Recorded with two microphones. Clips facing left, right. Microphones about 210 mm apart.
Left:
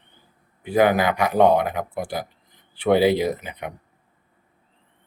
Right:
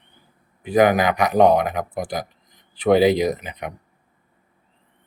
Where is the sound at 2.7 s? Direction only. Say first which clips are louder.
Right 2 dB; 15° right (ahead or behind).